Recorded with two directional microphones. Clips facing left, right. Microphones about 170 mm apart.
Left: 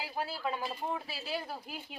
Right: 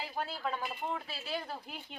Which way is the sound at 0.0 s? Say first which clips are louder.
Left 1 dB; 5° left (ahead or behind).